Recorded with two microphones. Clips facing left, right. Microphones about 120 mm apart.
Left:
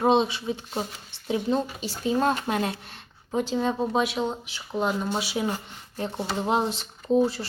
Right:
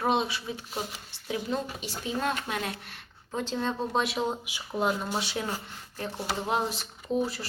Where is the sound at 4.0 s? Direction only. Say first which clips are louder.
Left 3 dB; centre (ahead or behind).